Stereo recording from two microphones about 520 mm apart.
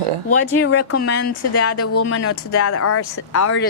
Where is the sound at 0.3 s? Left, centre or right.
Left.